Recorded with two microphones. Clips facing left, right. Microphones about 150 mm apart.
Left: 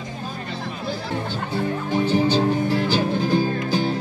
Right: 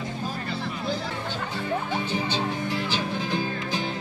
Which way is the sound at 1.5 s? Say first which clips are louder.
Left 5 dB; 40° left (ahead or behind).